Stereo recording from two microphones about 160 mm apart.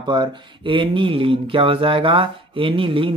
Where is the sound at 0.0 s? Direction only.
30° right (ahead or behind).